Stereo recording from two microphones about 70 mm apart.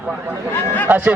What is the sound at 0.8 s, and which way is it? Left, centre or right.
Speech, right.